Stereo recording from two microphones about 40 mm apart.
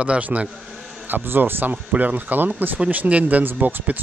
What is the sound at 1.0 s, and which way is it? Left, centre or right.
Speech, right.